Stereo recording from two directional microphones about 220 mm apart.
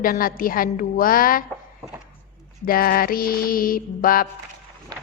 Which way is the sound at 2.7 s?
40° left (ahead or behind).